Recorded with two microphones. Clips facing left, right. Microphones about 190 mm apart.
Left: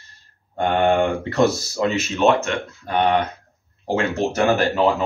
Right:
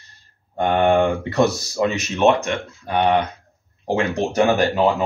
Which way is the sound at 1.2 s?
15° right (ahead or behind).